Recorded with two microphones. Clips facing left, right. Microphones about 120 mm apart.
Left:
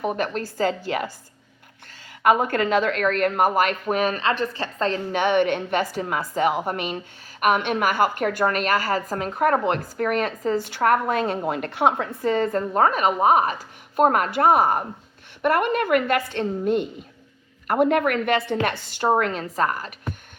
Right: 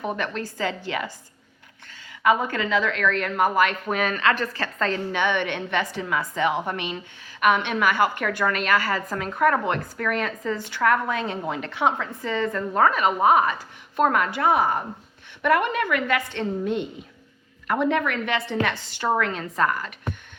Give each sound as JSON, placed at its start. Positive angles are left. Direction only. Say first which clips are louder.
{"t": 0.5, "sound": "a woman's voice", "louder": "left 4 dB", "side_deg": 45}
{"t": 5.1, "sound": "a woman's voice", "louder": "left 4 dB", "side_deg": 45}